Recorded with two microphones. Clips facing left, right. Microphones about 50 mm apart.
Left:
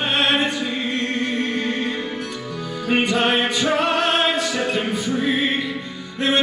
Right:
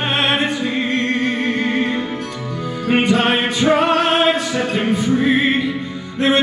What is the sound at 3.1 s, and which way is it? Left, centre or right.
Music, centre.